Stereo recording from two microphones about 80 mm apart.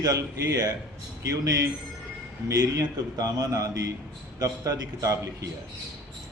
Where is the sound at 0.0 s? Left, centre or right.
Right.